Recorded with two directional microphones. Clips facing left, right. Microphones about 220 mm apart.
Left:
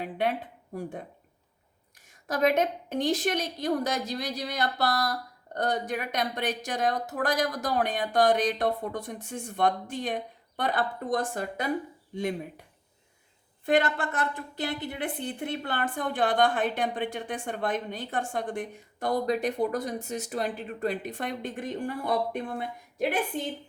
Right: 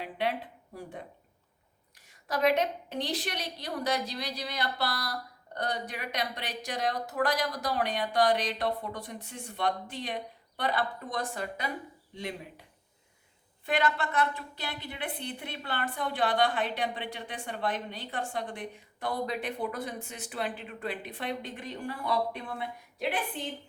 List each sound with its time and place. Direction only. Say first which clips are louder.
0.0 s speech: left 3 dB; 50° left (ahead or behind)
2.0 s a woman's voice: left 2 dB; 45° left (ahead or behind)
13.7 s a woman's voice: left 4 dB; 50° left (ahead or behind)